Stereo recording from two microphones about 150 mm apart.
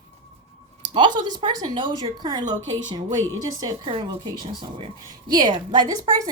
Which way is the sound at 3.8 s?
35° right (ahead or behind).